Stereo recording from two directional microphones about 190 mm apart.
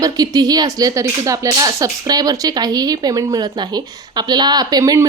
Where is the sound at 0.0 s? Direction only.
20° right (ahead or behind).